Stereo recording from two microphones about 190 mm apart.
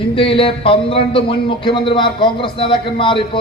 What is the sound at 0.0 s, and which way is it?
A man's voice, 30° left (ahead or behind).